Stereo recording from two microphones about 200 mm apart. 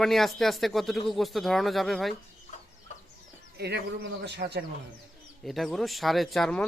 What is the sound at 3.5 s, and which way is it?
Speech, 55° right (ahead or behind).